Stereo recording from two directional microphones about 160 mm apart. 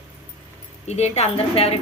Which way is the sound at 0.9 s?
45° left (ahead or behind).